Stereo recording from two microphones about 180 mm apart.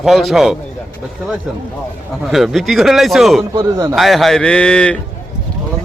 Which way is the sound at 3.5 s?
20° right (ahead or behind).